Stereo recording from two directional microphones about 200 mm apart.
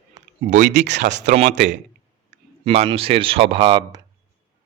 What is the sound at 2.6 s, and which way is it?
Speech, 30° right (ahead or behind).